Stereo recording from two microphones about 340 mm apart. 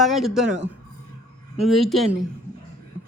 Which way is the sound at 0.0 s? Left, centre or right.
Centre.